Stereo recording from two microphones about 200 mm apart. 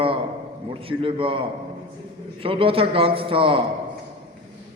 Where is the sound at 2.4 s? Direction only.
25° right (ahead or behind).